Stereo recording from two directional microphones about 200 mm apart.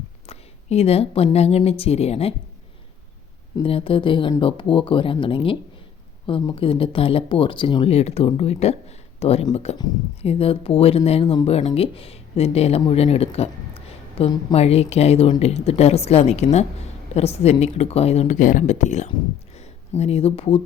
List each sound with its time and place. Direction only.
0.3 s speech: 30° left (ahead or behind)
3.6 s speech: 25° left (ahead or behind)